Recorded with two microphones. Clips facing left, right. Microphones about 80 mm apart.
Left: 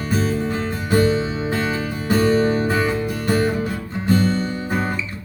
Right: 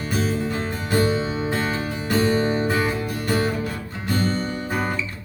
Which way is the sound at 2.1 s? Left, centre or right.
Centre.